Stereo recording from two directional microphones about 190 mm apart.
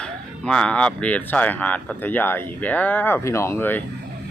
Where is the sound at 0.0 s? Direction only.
5° left (ahead or behind).